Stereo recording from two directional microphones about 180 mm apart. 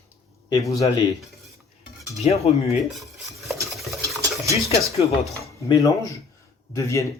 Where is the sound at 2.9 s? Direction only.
Centre (ahead or behind).